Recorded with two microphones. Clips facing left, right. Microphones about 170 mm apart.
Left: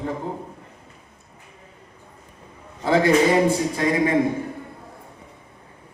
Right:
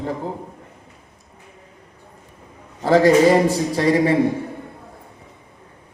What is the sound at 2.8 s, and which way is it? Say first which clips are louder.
A man's voice: right 4 dB; 40° right (ahead or behind).